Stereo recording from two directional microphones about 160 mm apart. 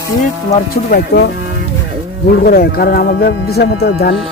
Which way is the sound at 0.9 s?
75° left (ahead or behind).